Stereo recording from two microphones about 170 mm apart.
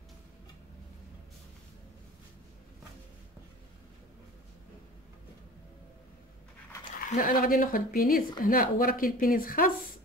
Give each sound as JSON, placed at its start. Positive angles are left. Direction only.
{"t": 7.1, "sound": "a woman's voice", "side_deg": 55}